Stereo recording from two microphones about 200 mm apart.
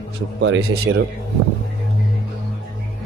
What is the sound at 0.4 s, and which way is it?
Speech, 90° right.